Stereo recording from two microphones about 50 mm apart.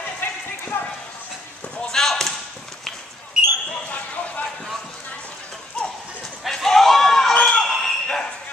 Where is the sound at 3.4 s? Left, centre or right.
Centre.